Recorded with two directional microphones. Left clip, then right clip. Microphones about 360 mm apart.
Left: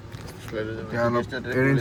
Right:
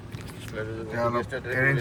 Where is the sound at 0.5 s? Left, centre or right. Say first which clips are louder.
Left 4 dB; left.